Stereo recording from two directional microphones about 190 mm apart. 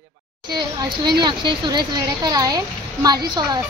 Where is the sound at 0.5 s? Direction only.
20° right (ahead or behind).